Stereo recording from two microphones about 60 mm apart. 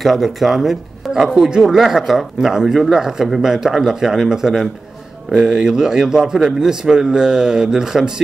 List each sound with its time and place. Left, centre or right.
0.0 s speech: centre